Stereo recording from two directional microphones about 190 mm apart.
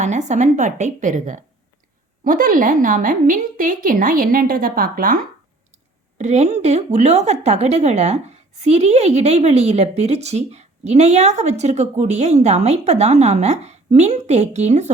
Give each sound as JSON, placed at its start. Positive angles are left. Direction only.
{"t": 0.0, "sound": "a woman's voice", "side_deg": -40}
{"t": 6.1, "sound": "a woman's voice", "side_deg": -35}